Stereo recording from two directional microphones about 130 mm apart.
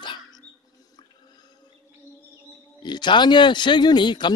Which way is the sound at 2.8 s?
35° left (ahead or behind).